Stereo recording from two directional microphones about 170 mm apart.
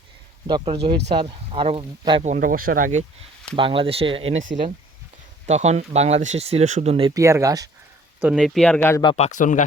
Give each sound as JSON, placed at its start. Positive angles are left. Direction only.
{"t": 0.4, "sound": "speech", "side_deg": -30}
{"t": 2.2, "sound": "speech", "side_deg": -50}
{"t": 3.5, "sound": "speech", "side_deg": -30}
{"t": 5.5, "sound": "speech", "side_deg": -40}
{"t": 7.1, "sound": "speech", "side_deg": -15}
{"t": 8.2, "sound": "speech", "side_deg": -5}
{"t": 8.8, "sound": "speech", "side_deg": 15}
{"t": 9.0, "sound": "speech", "side_deg": 40}